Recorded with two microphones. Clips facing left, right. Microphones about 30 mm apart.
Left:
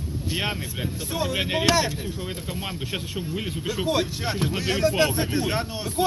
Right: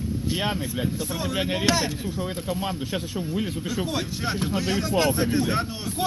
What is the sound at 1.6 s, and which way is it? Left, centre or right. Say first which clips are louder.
Speech: left 2 dB; left.